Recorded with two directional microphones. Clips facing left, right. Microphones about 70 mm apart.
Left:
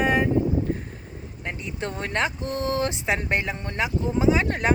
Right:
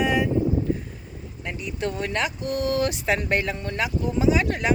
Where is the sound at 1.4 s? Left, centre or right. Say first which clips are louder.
Right 2 dB; left.